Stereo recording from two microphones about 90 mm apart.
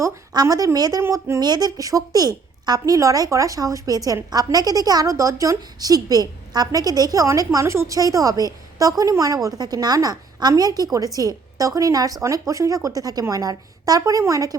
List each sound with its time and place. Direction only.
0.3 s speech: 40° right (ahead or behind)
1.0 s a woman's voice: 30° right (ahead or behind)
1.4 s a woman's voice: 50° right (ahead or behind)